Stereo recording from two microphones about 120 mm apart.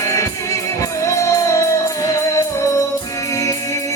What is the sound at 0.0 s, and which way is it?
Music, 25° left (ahead or behind).